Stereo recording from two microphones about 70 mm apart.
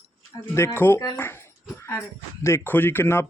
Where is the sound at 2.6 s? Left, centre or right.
Left.